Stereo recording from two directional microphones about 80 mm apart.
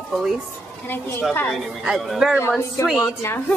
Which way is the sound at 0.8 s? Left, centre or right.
Left.